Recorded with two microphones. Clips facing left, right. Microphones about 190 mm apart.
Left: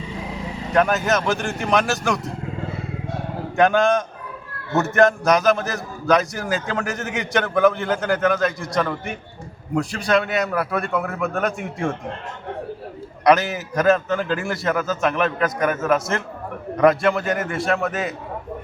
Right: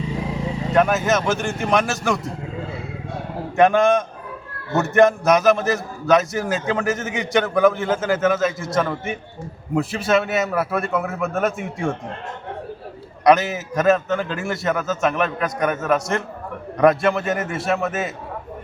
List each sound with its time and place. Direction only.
0.7 s a man's voice: centre (ahead or behind)
3.6 s a man's voice: centre (ahead or behind)
13.2 s a man's voice: centre (ahead or behind)